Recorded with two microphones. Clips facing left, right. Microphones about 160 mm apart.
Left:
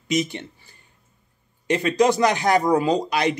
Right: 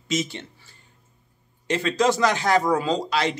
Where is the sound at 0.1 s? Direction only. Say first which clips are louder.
Left 3 dB; 15° left (ahead or behind).